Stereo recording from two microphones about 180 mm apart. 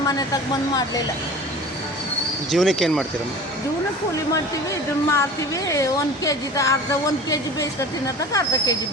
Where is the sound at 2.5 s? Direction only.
Centre (ahead or behind).